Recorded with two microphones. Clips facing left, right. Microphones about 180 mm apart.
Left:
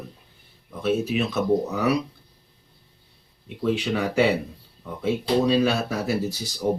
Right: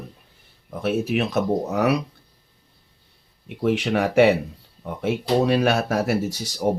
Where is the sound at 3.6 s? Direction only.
75° right (ahead or behind).